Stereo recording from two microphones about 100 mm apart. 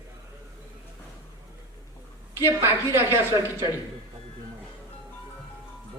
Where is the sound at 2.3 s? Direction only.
25° right (ahead or behind).